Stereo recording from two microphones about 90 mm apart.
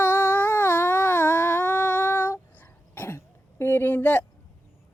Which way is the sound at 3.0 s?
25° left (ahead or behind).